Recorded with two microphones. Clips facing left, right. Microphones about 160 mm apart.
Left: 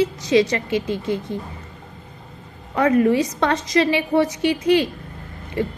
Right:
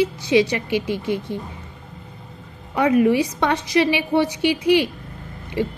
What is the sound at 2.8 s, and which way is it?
A woman's voice, 15° right (ahead or behind).